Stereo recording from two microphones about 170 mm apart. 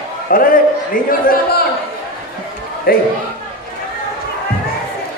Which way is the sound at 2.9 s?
60° left (ahead or behind).